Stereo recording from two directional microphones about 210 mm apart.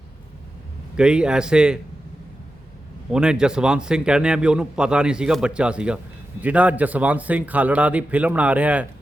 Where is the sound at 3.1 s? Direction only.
5° right (ahead or behind).